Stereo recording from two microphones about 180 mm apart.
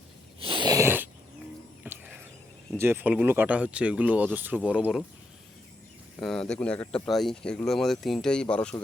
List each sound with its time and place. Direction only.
0.3 s a sound: 30° right (ahead or behind); by 2.2 s 10° right (ahead or behind)
2.7 s speech: 10° right (ahead or behind)
6.1 s speech: 5° left (ahead or behind)